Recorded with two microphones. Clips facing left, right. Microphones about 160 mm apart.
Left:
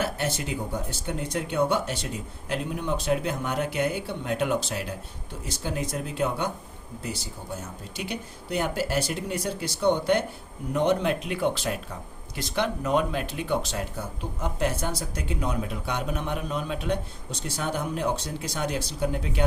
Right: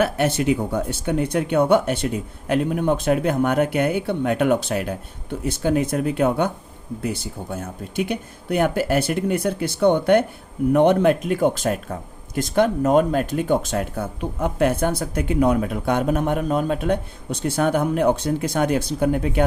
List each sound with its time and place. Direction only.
0.0 s speech: 60° right (ahead or behind)